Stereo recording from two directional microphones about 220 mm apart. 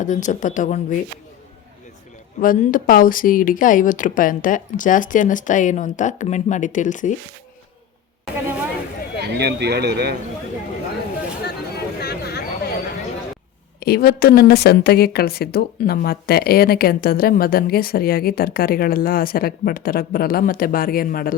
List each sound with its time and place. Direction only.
0.0 s speech: 35° left (ahead or behind)
2.4 s speech: 40° left (ahead or behind)
9.2 s speech: 50° right (ahead or behind)
11.9 s a sound: 45° left (ahead or behind)
13.7 s a woman's voice: 45° left (ahead or behind)